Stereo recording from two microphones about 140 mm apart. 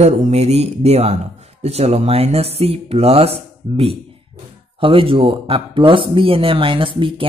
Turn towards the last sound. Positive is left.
turn(degrees=-40)  # may be behind; listen again after turning